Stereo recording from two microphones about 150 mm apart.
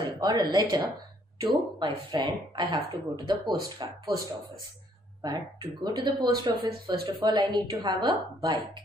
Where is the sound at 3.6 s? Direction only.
25° right (ahead or behind).